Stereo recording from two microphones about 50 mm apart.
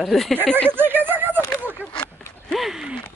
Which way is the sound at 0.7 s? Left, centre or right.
Right.